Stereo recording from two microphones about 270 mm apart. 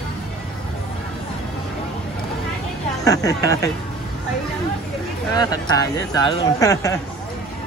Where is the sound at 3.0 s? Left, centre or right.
Centre.